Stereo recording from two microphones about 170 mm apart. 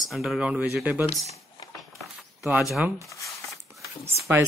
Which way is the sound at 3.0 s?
20° left (ahead or behind).